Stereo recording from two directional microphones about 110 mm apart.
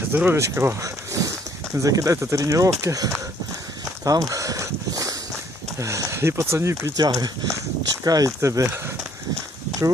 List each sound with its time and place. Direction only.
0.1 s speech: 20° right (ahead or behind)
4.0 s a sound: 30° right (ahead or behind)
5.8 s speech: 30° right (ahead or behind)
6.9 s speech: 35° right (ahead or behind)